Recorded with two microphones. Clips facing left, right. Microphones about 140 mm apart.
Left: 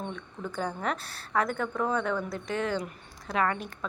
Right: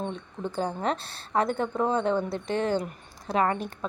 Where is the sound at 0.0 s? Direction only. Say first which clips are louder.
Right 4 dB; 25° right (ahead or behind).